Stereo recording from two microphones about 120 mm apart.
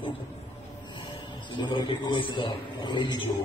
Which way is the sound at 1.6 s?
40° left (ahead or behind).